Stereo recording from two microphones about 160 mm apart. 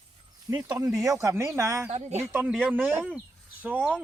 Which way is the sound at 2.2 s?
15° right (ahead or behind).